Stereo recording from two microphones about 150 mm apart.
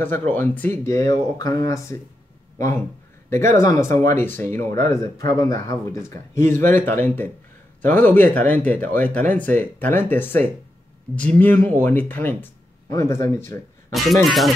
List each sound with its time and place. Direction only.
0.3 s speech: 15° left (ahead or behind)
3.3 s speech: 15° left (ahead or behind)
14.2 s speech: centre (ahead or behind)